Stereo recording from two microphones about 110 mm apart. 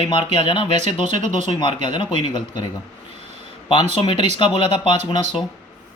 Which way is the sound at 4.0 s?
50° left (ahead or behind).